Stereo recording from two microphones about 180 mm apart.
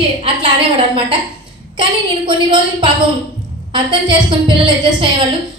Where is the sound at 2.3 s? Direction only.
30° right (ahead or behind).